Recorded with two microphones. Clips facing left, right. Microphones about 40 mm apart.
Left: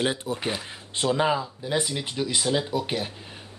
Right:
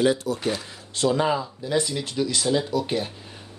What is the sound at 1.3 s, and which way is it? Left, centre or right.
Speech, centre.